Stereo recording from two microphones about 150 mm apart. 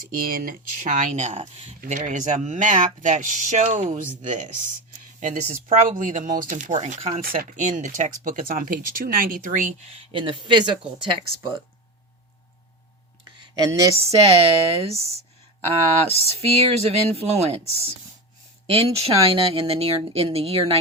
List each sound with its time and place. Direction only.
0.0 s speech: 75° right (ahead or behind); by 7.2 s 50° right (ahead or behind)
7.3 s speech: 65° right (ahead or behind)
9.9 s speech: 35° right (ahead or behind)
13.9 s chopping: 45° right (ahead or behind)
16.1 s chopping: 45° right (ahead or behind)
18.7 s speech: 40° right (ahead or behind)